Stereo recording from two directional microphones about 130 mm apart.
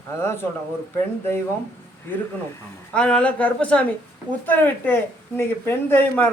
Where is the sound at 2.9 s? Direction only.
10° left (ahead or behind).